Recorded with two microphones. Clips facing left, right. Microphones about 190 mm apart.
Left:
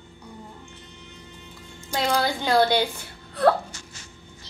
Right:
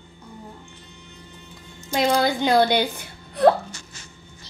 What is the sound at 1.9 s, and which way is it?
Speech, 15° right (ahead or behind).